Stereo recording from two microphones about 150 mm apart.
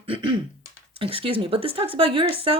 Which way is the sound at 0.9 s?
35° right (ahead or behind).